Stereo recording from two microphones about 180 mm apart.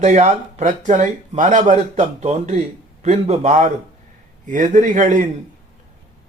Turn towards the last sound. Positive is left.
turn(degrees=-45)  # may be behind; listen again after turning